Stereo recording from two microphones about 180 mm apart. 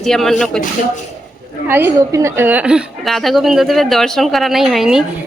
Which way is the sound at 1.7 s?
15° right (ahead or behind).